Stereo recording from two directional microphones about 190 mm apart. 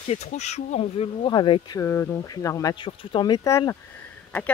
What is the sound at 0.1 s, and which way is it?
Speech, 35° left (ahead or behind).